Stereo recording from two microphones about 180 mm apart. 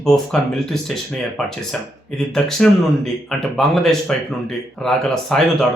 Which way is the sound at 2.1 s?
5° left (ahead or behind).